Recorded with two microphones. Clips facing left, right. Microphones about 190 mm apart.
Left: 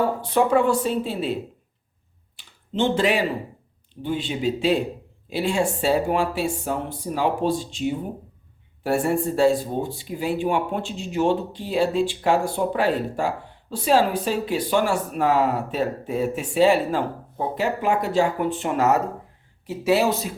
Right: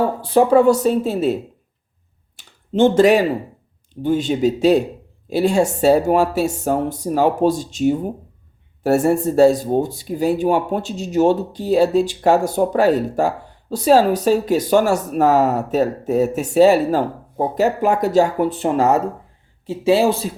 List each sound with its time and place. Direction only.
0.2 s speech: 30° right (ahead or behind)
2.3 s a sound: 45° right (ahead or behind)
4.0 s speech: 45° right (ahead or behind)